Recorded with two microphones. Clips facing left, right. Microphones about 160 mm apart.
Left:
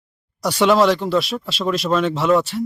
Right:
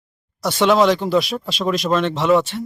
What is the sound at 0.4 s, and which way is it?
Speech, centre (ahead or behind).